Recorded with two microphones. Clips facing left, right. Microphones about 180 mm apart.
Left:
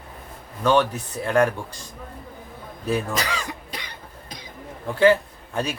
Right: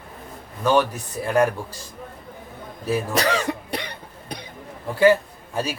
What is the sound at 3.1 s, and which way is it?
Cough, 65° right (ahead or behind).